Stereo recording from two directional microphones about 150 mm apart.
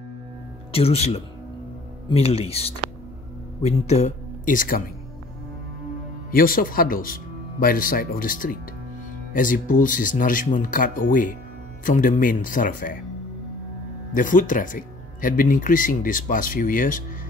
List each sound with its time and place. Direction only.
0.7 s speech: 40° left (ahead or behind)
4.6 s speech: 70° left (ahead or behind)
6.3 s speech: 70° left (ahead or behind)
14.1 s speech: 60° left (ahead or behind)